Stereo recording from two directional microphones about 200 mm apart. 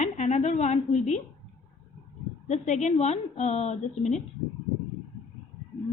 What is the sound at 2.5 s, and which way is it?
A woman's voice, 35° left (ahead or behind).